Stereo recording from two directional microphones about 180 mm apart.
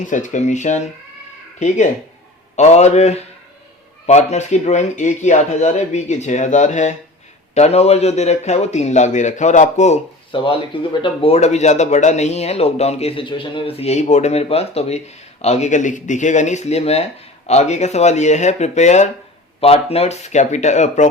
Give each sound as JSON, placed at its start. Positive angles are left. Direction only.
{"t": 0.0, "sound": "speech", "side_deg": 45}
{"t": 10.3, "sound": "speech", "side_deg": 30}